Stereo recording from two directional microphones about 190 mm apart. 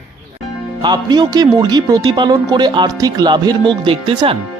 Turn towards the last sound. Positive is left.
turn(degrees=-30)  # may be behind; listen again after turning